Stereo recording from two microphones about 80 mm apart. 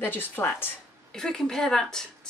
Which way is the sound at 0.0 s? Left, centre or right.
Left.